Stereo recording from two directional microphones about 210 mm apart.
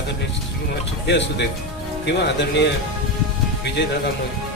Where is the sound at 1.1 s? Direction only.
55° left (ahead or behind).